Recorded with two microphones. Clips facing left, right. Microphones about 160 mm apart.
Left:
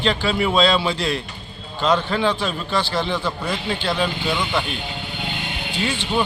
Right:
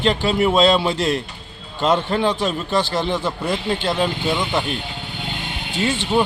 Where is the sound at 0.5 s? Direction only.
45° right (ahead or behind).